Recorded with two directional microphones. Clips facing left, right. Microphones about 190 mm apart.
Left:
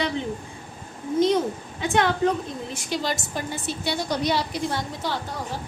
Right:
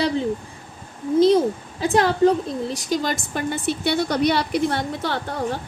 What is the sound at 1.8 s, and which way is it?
A woman's voice, 35° right (ahead or behind).